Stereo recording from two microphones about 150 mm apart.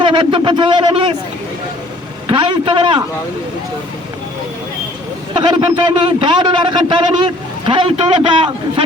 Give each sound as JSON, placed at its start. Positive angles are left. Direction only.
{"t": 0.0, "sound": "a man's voice", "side_deg": -35}
{"t": 2.2, "sound": "a man's voice", "side_deg": -35}
{"t": 5.3, "sound": "a man's voice", "side_deg": -30}